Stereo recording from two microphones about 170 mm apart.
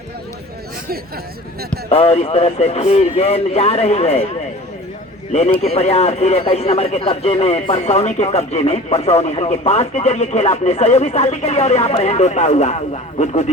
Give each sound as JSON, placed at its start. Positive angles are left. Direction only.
{"t": 1.9, "sound": "speech", "side_deg": 35}
{"t": 5.3, "sound": "speech", "side_deg": 40}